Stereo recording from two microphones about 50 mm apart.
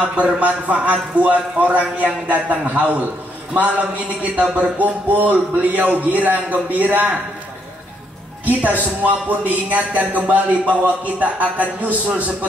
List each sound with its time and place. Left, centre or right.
0.0 s a man's voice: right
8.5 s a man's voice: right